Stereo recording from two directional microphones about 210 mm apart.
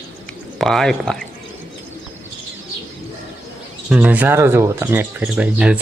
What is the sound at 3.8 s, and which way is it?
Speech, 5° right (ahead or behind).